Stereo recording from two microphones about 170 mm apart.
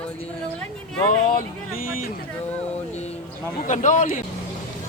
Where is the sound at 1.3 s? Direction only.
55° left (ahead or behind).